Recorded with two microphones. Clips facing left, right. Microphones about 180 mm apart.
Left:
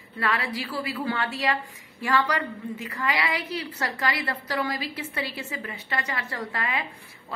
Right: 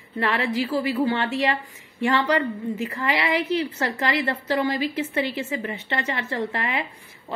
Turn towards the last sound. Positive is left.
turn(degrees=-25)  # may be behind; listen again after turning